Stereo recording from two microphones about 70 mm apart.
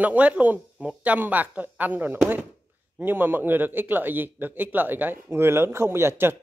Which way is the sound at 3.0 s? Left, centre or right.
Right.